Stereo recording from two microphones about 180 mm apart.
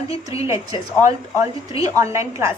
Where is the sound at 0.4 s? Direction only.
15° right (ahead or behind).